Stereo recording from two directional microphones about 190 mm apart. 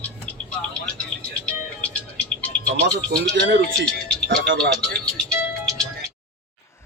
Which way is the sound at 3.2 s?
70° right (ahead or behind).